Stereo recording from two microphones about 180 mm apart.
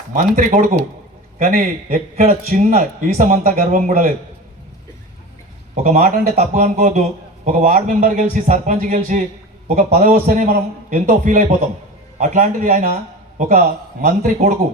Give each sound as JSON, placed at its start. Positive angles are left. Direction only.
{"t": 0.3, "sound": "a man's voice", "side_deg": -50}
{"t": 5.7, "sound": "a man's voice", "side_deg": -40}
{"t": 14.0, "sound": "a man's voice", "side_deg": -40}